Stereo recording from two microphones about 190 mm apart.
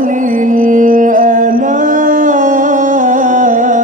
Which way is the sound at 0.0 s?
45° right (ahead or behind).